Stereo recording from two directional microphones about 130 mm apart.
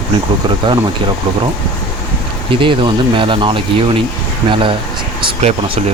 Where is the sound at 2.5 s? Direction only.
40° right (ahead or behind).